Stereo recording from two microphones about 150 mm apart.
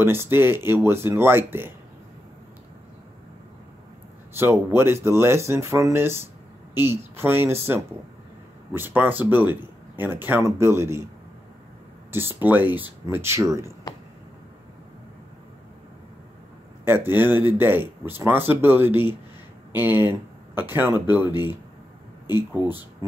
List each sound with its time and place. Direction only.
0.0 s speech: 15° right (ahead or behind)
4.4 s speech: 15° right (ahead or behind)
8.7 s speech: 15° right (ahead or behind)
12.1 s speech: 15° right (ahead or behind)
16.8 s speech: 15° right (ahead or behind)